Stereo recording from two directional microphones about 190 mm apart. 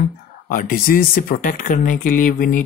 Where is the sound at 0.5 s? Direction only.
50° left (ahead or behind).